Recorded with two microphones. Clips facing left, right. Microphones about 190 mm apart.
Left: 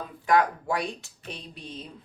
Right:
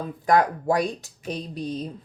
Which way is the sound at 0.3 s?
40° right (ahead or behind).